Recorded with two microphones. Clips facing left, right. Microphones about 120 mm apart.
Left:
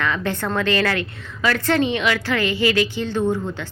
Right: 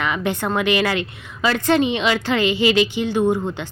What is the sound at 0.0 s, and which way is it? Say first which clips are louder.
A woman's voice: right 1 dB; 15° right (ahead or behind).